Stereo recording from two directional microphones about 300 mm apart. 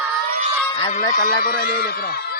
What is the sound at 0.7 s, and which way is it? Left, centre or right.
Speech, centre.